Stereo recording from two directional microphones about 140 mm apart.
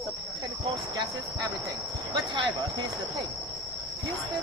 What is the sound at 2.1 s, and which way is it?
Speech, 35° right (ahead or behind).